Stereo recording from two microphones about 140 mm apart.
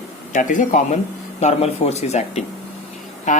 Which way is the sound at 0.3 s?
65° left (ahead or behind).